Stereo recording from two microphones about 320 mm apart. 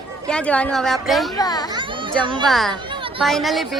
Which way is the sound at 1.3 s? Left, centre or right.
Centre.